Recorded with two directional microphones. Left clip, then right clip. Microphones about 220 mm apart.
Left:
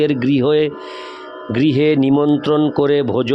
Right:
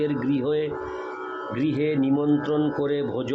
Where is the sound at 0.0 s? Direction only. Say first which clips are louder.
Left 9 dB; 50° left (ahead or behind).